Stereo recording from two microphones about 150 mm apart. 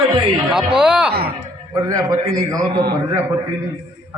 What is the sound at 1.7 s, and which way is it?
A man's voice, 20° right (ahead or behind).